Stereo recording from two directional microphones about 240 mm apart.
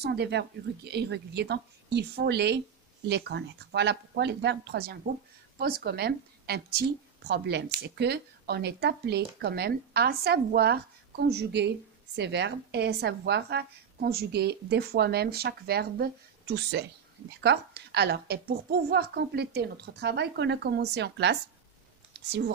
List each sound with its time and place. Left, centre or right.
0.0 s a woman's voice: right